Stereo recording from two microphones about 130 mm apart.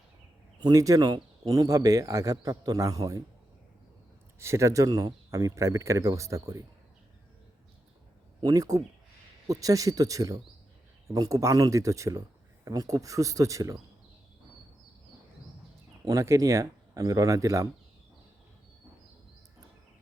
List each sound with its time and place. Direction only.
0.6 s speech: 25° right (ahead or behind)
4.4 s speech: 20° right (ahead or behind)
8.4 s speech: 30° right (ahead or behind)
16.0 s speech: 25° right (ahead or behind)